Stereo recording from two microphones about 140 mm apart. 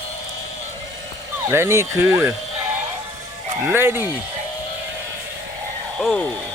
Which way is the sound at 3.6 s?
15° right (ahead or behind).